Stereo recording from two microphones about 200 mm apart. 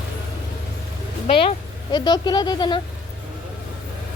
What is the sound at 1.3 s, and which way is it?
Speech, 25° left (ahead or behind).